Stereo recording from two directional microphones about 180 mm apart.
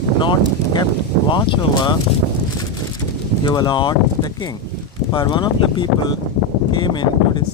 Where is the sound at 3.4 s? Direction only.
25° left (ahead or behind).